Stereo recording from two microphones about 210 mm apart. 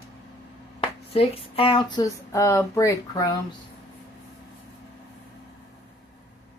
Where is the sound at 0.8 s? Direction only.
30° left (ahead or behind).